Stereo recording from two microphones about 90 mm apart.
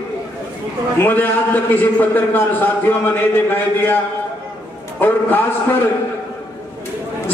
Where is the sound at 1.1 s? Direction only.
20° left (ahead or behind).